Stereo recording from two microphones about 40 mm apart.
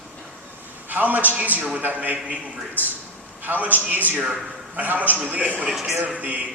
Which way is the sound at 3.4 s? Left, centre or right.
Right.